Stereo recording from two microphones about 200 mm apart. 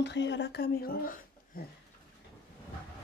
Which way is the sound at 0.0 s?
60° left (ahead or behind).